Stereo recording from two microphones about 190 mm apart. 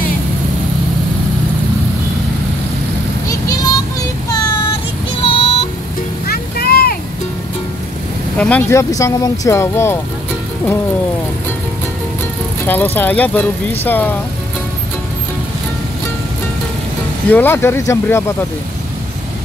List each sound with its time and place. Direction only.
3.3 s vehicle: 20° left (ahead or behind)
5.2 s music: 30° left (ahead or behind)
6.2 s music: 55° left (ahead or behind)
8.4 s speech: 10° left (ahead or behind)
12.6 s speech: 10° left (ahead or behind)
17.3 s speech: 10° left (ahead or behind)